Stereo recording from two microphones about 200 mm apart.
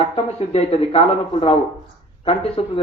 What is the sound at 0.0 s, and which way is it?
A man's voice, 30° left (ahead or behind).